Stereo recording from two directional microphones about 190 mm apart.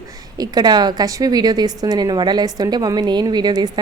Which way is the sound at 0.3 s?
20° right (ahead or behind).